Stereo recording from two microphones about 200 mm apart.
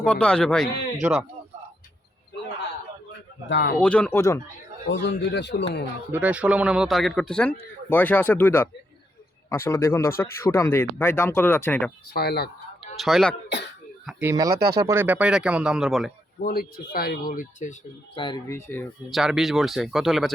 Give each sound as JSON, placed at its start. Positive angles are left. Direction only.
{"t": 0.0, "sound": "speech", "side_deg": 5}
{"t": 3.5, "sound": "speech", "side_deg": 60}
{"t": 3.8, "sound": "speech", "side_deg": 5}
{"t": 4.9, "sound": "speech", "side_deg": 60}
{"t": 6.1, "sound": "speech", "side_deg": -10}
{"t": 12.1, "sound": "speech", "side_deg": 55}
{"t": 13.0, "sound": "speech", "side_deg": 0}
{"t": 14.5, "sound": "speech", "side_deg": -50}
{"t": 14.8, "sound": "speech", "side_deg": -15}
{"t": 16.4, "sound": "speech", "side_deg": 50}
{"t": 18.2, "sound": "speech", "side_deg": 20}
{"t": 19.1, "sound": "speech", "side_deg": 0}